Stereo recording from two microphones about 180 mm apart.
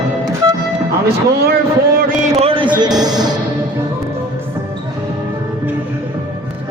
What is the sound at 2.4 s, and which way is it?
Speech, 30° right (ahead or behind).